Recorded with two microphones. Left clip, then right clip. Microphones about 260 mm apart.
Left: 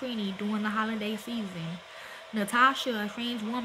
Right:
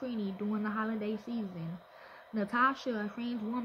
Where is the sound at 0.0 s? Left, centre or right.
Centre.